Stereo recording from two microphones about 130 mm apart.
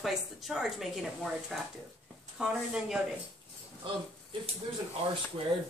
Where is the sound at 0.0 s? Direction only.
Centre (ahead or behind).